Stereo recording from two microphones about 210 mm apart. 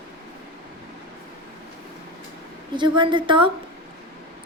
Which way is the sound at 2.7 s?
20° right (ahead or behind).